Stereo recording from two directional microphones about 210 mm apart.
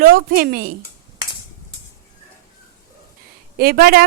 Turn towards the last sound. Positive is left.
turn(degrees=-45)  # may be behind; listen again after turning